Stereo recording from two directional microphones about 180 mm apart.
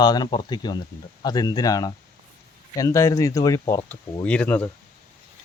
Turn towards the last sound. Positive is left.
turn(degrees=10)  # may be behind; listen again after turning